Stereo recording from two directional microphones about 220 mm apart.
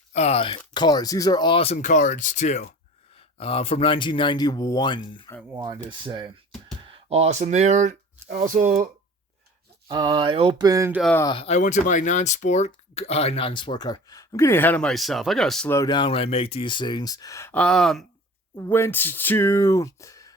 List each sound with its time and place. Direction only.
0.1 s speech: 30° left (ahead or behind)
5.5 s speech: 20° right (ahead or behind)
9.9 s speech: 20° right (ahead or behind)
11.0 s speech: 10° left (ahead or behind)
11.3 s speech: 25° left (ahead or behind)